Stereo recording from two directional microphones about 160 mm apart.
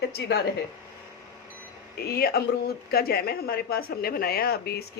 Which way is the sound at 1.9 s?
75° left (ahead or behind).